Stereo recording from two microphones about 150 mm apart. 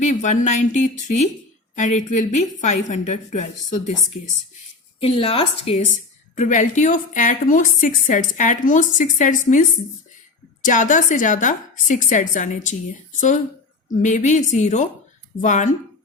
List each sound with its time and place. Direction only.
0.0 s a woman's voice: 55° left (ahead or behind)
4.9 s speech: 40° left (ahead or behind)
6.3 s a woman's voice: 55° left (ahead or behind)